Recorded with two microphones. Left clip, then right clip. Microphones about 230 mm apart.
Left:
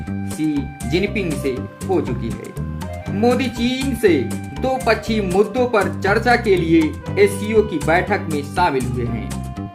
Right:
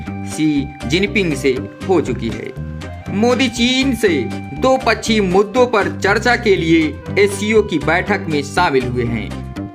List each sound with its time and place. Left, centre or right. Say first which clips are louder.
0.3 s speech: right 5 dB; right